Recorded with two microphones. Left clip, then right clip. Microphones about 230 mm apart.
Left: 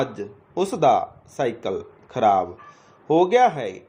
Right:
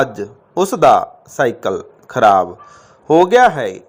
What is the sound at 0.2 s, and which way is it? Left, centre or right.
A man's voice, right.